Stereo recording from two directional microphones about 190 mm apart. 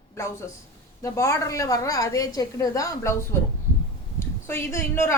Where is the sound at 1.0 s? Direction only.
15° left (ahead or behind).